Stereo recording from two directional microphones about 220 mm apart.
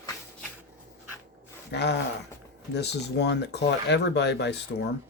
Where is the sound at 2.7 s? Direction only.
50° left (ahead or behind).